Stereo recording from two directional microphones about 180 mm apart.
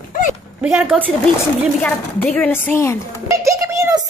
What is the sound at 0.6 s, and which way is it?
Speech, 5° right (ahead or behind).